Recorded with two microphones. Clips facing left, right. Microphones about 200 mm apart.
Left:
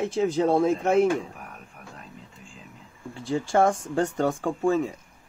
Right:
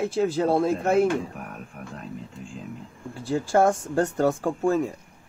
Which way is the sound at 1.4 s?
55° right (ahead or behind).